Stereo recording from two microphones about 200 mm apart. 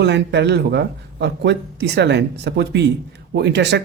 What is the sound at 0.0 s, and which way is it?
Speech, 60° right (ahead or behind).